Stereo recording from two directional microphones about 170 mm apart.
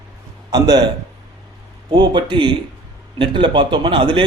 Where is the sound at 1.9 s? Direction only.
25° right (ahead or behind).